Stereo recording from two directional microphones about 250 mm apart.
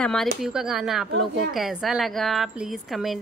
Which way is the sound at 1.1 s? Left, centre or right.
Right.